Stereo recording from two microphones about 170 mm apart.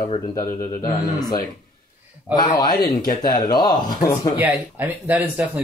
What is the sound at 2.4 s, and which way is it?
Speech, 25° left (ahead or behind).